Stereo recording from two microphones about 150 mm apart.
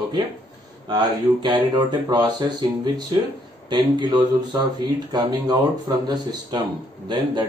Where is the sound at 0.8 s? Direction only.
30° right (ahead or behind).